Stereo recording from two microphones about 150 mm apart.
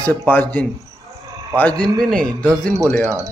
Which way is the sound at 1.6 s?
10° left (ahead or behind).